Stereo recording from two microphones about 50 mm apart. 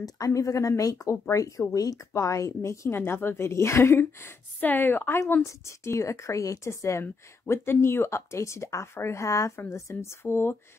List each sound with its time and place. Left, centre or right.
0.3 s speech: left
3.0 s a woman's voice: left
4.6 s speech: left
5.4 s a woman's voice: left
10.2 s speech: left